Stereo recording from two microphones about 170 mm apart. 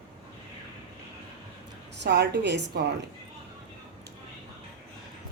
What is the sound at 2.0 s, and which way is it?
Speech, 80° right.